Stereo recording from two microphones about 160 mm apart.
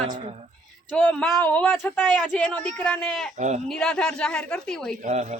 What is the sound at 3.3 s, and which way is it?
Speech, 50° right (ahead or behind).